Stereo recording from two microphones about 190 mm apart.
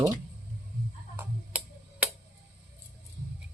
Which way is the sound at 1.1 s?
10° right (ahead or behind).